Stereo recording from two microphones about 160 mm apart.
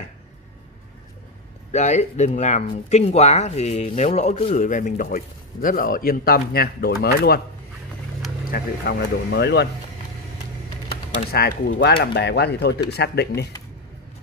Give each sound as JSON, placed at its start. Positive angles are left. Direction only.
{"t": 1.7, "sound": "speech", "side_deg": 45}
{"t": 4.6, "sound": "a man's voice", "side_deg": 55}
{"t": 8.5, "sound": "speech", "side_deg": 75}
{"t": 11.1, "sound": "speech", "side_deg": 75}